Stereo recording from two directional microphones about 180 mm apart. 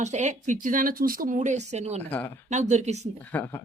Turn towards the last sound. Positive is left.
turn(degrees=10)  # may be behind; listen again after turning